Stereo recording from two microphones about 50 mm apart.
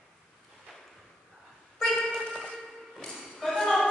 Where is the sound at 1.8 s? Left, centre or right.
Centre.